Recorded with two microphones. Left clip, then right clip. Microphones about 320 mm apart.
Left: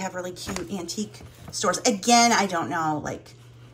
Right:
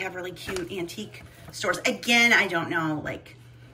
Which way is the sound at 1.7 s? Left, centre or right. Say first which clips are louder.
Left 2 dB; centre.